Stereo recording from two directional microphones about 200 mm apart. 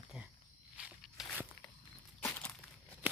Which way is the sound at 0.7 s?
5° right (ahead or behind).